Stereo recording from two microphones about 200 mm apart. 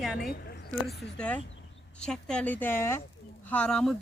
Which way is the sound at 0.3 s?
55° left (ahead or behind).